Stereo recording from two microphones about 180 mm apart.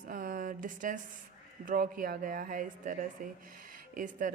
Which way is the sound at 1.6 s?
55° right (ahead or behind).